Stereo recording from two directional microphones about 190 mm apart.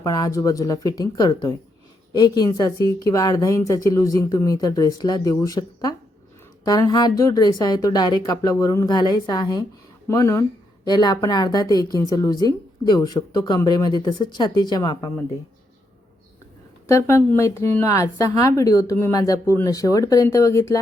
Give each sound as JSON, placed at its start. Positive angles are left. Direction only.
{"t": 0.0, "sound": "a woman's voice", "side_deg": 20}
{"t": 16.8, "sound": "a woman's voice", "side_deg": 15}